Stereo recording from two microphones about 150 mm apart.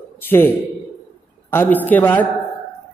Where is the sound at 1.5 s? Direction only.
15° left (ahead or behind).